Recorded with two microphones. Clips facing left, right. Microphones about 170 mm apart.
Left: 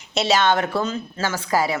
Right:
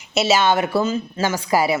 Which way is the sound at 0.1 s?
5° right (ahead or behind).